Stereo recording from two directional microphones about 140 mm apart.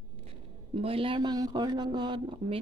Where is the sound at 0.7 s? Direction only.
40° right (ahead or behind).